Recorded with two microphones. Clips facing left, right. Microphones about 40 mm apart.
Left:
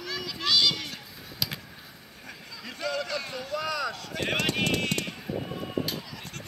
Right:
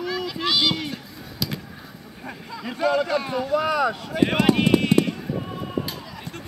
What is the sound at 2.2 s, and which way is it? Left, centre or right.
Speech, right.